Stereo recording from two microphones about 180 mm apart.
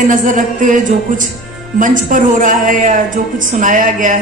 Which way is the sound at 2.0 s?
45° right (ahead or behind).